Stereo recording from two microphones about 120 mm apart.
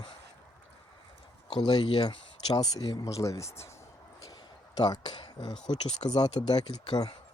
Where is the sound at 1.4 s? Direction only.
45° left (ahead or behind); by 3.7 s 25° left (ahead or behind).